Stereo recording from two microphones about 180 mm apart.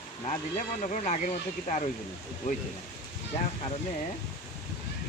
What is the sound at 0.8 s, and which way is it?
Speech, 45° left (ahead or behind).